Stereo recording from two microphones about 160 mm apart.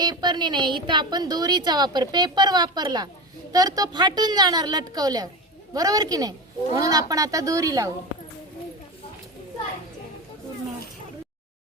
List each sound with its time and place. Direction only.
0.0 s a woman's voice: 25° right (ahead or behind)